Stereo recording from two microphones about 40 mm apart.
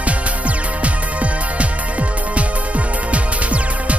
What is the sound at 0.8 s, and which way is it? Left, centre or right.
Music, right.